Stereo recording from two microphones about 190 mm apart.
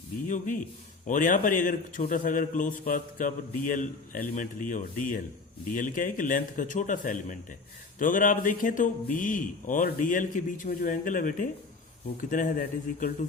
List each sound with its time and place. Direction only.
0.3 s a man's voice: 45° left (ahead or behind)